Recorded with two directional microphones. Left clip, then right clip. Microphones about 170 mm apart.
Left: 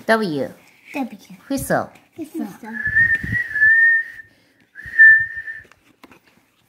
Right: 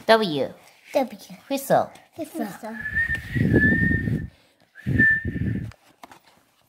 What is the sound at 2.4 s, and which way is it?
Speech, 40° right (ahead or behind).